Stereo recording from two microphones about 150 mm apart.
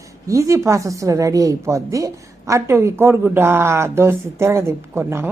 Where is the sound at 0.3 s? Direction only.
20° right (ahead or behind).